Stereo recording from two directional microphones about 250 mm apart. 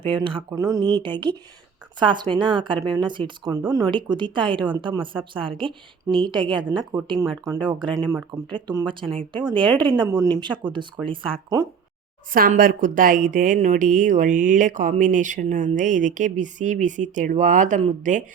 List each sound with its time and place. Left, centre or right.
0.0 s a woman's voice: centre
12.3 s speech: right